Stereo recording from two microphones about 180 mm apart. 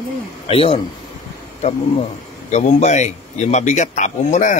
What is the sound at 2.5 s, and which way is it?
A man's voice, 40° left (ahead or behind).